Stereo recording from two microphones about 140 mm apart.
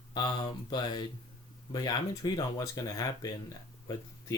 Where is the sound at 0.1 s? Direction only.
35° left (ahead or behind).